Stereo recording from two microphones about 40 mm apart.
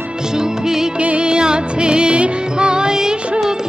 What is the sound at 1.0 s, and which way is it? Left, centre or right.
Music of bollywood, right.